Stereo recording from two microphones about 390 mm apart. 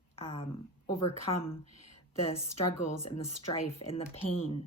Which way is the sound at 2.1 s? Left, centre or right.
Centre.